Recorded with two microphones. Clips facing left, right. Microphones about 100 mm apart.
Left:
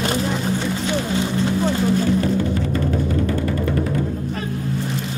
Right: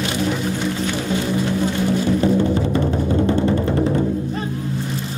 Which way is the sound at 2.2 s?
25° right (ahead or behind).